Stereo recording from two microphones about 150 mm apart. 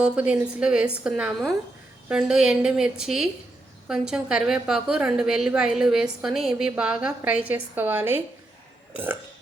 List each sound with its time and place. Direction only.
0.0 s a woman's voice: 5° right (ahead or behind)